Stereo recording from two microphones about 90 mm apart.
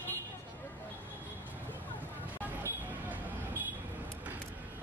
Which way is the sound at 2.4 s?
20° right (ahead or behind).